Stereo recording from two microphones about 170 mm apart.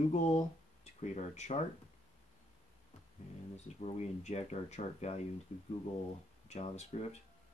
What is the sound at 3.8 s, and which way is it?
Speech, 40° left (ahead or behind).